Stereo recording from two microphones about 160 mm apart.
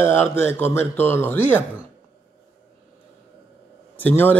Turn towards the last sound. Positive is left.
turn(degrees=10)  # may be behind; listen again after turning